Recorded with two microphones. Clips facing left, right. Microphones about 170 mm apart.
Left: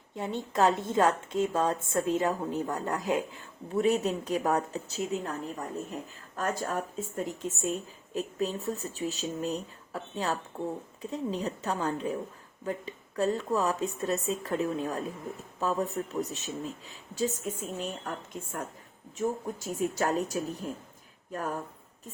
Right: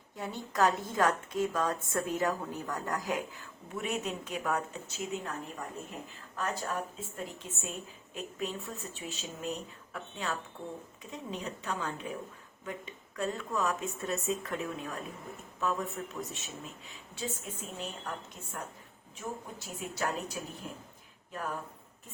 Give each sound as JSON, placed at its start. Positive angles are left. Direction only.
{"t": 0.2, "sound": "a woman's voice", "side_deg": 25}